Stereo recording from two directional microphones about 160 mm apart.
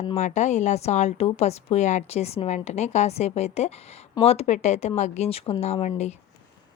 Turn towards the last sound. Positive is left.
turn(degrees=45)  # may be behind; listen again after turning